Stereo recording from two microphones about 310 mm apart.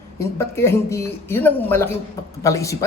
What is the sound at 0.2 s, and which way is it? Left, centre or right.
A woman's voice, centre.